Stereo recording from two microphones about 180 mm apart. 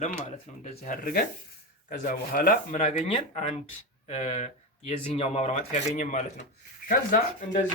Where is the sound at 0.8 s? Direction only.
50° left (ahead or behind).